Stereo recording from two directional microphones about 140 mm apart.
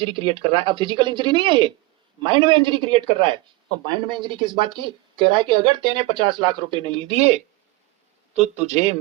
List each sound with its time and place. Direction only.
0.0 s speech: 40° right (ahead or behind)